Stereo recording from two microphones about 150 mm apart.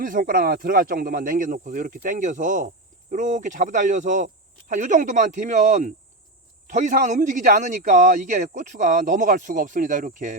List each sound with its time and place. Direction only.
0.0 s speech: 65° right (ahead or behind)